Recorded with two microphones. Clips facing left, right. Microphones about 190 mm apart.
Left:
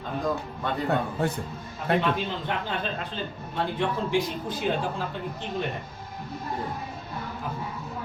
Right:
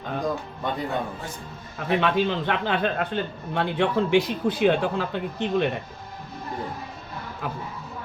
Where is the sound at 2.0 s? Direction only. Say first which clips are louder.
Right 4 dB; 75° right (ahead or behind).